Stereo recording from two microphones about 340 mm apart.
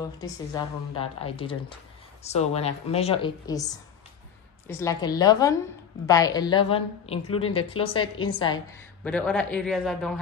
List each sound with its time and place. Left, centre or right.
0.0 s a woman's voice: centre